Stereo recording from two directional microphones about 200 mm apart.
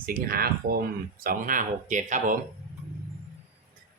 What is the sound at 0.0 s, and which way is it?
Speech, 45° right (ahead or behind).